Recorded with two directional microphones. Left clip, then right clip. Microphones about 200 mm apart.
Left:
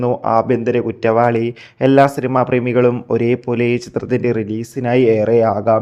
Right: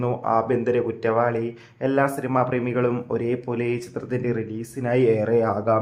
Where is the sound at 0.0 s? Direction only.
30° left (ahead or behind).